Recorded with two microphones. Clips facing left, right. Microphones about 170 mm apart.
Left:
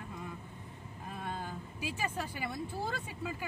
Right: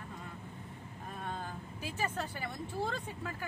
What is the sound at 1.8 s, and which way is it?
Speech, 10° left (ahead or behind).